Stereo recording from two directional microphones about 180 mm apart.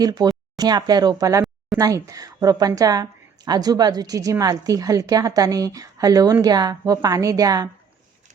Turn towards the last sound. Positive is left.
turn(degrees=-20)  # may be behind; listen again after turning